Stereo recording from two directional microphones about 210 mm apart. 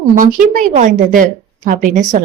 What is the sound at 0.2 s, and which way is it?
A woman's voice, 40° right (ahead or behind).